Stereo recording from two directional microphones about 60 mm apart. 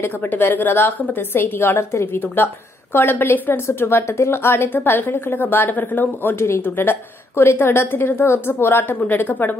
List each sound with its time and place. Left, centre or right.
0.0 s a woman's voice: left